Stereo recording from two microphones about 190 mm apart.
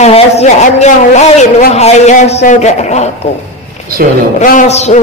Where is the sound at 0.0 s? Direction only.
35° left (ahead or behind).